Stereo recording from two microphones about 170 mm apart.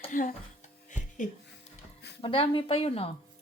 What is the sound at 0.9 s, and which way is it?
Music, 45° left (ahead or behind).